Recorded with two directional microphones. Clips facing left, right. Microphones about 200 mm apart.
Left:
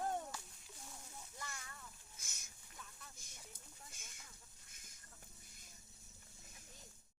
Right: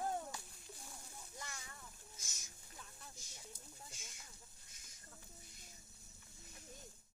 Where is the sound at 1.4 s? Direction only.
15° right (ahead or behind).